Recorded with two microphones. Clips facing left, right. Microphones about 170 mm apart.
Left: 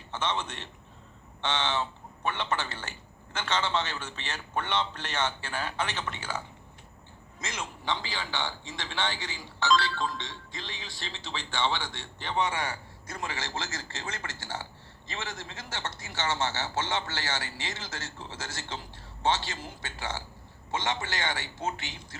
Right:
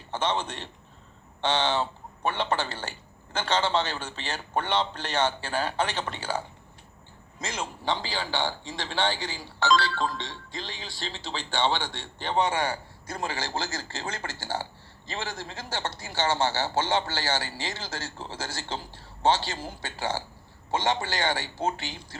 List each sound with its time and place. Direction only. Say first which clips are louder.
0.1 s a man's voice: right 4 dB; 35° right (ahead or behind)
7.4 s speech: right 4 dB; 35° right (ahead or behind)